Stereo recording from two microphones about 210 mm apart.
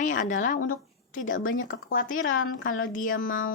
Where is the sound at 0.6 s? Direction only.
70° left (ahead or behind).